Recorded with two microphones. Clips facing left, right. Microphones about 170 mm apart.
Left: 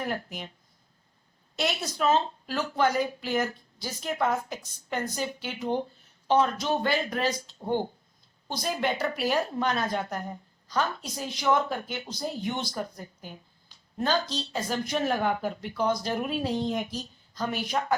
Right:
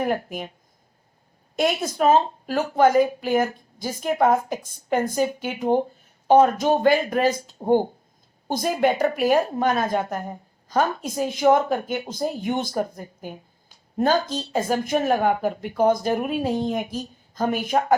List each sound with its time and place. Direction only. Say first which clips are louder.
0.0 s a woman's voice: right 8 dB; 50° right (ahead or behind)
1.5 s a woman's voice: right 8 dB; 50° right (ahead or behind)